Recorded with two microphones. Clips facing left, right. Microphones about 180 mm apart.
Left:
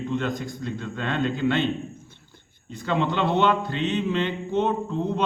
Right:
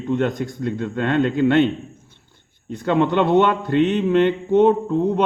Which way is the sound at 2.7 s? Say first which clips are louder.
Right 7 dB; 60° right (ahead or behind).